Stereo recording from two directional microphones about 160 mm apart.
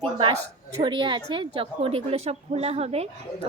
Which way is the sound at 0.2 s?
35° right (ahead or behind).